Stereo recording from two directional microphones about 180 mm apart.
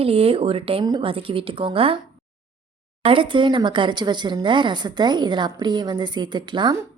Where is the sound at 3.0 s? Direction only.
30° right (ahead or behind).